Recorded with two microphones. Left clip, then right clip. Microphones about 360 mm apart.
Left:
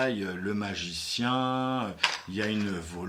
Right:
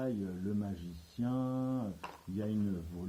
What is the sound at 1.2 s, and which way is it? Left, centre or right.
Speech, centre.